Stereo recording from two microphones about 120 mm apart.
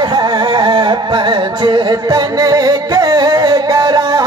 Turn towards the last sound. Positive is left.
turn(degrees=-35)  # may be behind; listen again after turning